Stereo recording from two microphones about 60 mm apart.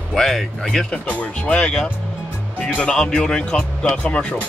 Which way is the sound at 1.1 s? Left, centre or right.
Left.